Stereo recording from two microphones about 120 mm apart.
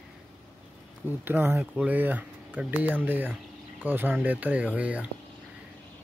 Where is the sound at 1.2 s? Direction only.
15° right (ahead or behind).